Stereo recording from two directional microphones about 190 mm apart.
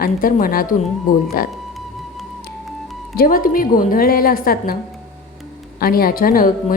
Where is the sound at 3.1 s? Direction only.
50° left (ahead or behind).